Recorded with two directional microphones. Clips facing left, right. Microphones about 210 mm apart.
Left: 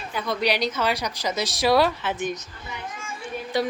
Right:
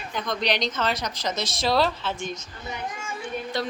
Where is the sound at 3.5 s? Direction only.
10° left (ahead or behind).